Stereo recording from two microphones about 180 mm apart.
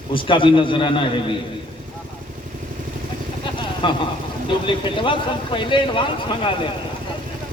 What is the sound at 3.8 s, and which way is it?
A man's voice, 30° left (ahead or behind).